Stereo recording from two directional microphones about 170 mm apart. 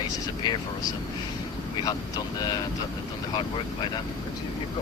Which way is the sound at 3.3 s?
25° left (ahead or behind).